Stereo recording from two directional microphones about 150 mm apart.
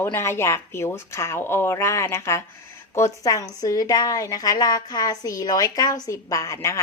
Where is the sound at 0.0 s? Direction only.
15° left (ahead or behind).